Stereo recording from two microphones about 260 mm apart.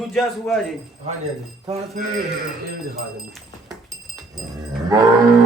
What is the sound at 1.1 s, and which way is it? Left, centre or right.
Speech, right.